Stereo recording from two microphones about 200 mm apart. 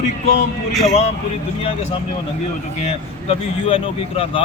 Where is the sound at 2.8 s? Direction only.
30° left (ahead or behind).